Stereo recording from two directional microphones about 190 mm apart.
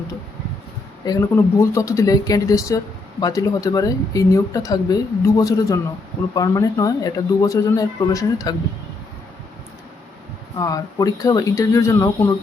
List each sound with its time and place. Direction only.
1.0 s speech: 20° left (ahead or behind)
10.6 s speech: 20° left (ahead or behind)